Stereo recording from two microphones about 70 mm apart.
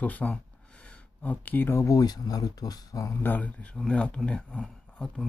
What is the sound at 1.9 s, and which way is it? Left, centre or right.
Speech, left.